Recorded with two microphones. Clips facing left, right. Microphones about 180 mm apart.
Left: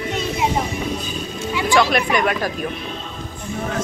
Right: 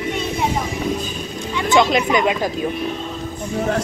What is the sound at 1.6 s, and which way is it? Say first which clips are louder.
Speech: right 2 dB; 20° right (ahead or behind).